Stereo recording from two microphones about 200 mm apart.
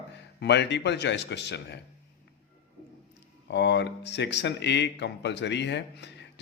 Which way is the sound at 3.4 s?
60° left (ahead or behind).